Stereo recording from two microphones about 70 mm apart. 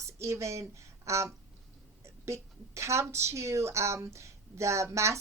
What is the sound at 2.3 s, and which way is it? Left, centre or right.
A woman's voice, right.